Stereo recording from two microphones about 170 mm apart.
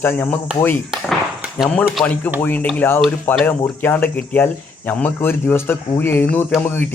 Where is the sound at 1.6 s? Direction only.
5° left (ahead or behind).